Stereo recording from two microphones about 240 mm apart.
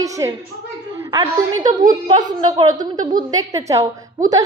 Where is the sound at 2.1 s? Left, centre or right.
Centre.